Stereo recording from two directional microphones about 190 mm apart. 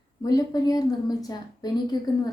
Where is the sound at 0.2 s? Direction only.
20° left (ahead or behind).